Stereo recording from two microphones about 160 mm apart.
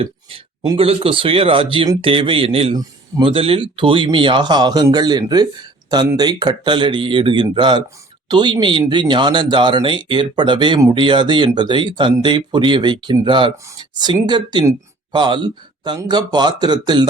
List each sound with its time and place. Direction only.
0.3 s speech: 30° right (ahead or behind)